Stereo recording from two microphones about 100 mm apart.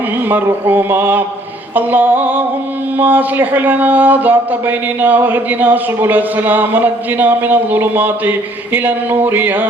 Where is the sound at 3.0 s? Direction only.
20° right (ahead or behind).